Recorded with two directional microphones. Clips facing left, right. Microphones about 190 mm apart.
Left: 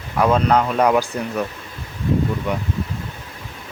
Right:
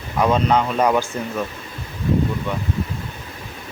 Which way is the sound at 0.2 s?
5° left (ahead or behind).